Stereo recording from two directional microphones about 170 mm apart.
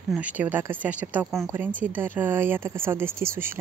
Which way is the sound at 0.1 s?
10° right (ahead or behind).